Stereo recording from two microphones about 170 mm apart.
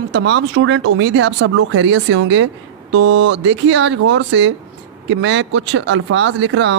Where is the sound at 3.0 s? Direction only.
90° right.